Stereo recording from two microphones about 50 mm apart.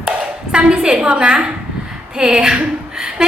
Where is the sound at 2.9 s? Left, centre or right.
Centre.